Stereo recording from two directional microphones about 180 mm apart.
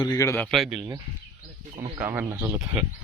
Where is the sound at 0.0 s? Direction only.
20° left (ahead or behind).